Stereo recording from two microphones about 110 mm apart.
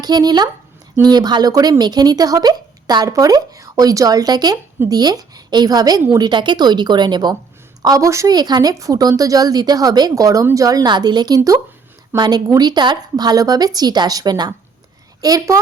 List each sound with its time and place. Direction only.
0.0 s speech: 40° right (ahead or behind)